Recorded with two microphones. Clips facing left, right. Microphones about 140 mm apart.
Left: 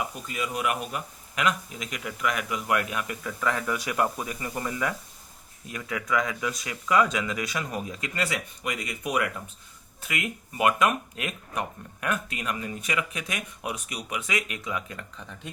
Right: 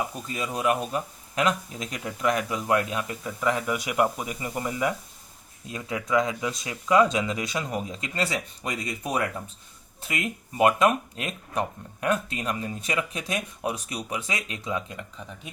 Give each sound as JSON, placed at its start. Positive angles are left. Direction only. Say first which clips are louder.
{"t": 0.3, "sound": "speech", "louder": "right 4 dB", "side_deg": -30}